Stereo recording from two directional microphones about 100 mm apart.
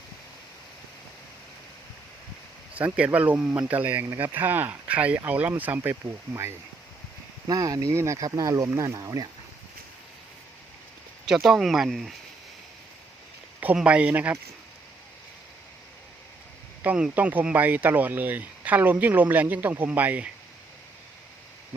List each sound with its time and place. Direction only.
2.7 s speech: 15° right (ahead or behind)
7.4 s speech: 35° right (ahead or behind)
11.3 s speech: centre (ahead or behind)
13.7 s speech: 10° right (ahead or behind)
16.8 s speech: 15° right (ahead or behind)